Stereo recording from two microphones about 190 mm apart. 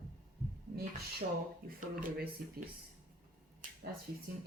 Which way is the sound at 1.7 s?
50° right (ahead or behind).